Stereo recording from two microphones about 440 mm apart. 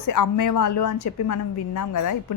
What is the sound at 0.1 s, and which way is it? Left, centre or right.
A woman's voice, left.